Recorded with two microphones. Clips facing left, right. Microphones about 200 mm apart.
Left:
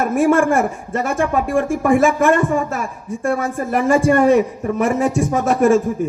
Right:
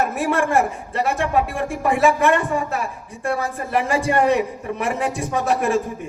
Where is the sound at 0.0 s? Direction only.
45° left (ahead or behind).